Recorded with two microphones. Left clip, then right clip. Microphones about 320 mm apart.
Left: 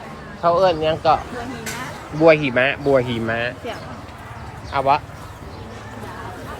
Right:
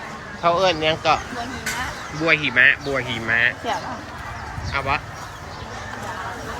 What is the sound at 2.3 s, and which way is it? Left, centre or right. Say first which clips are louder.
Speech: left 1 dB; centre.